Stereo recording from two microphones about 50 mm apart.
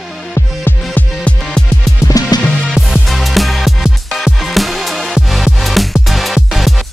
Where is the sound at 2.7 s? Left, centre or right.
Centre.